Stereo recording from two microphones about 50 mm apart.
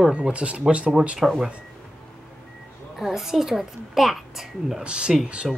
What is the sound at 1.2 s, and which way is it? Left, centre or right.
Speech, centre.